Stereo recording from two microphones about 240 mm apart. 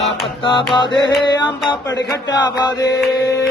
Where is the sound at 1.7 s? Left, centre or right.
Centre.